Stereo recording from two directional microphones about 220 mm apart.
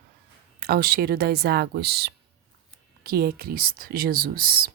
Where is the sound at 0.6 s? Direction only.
45° right (ahead or behind).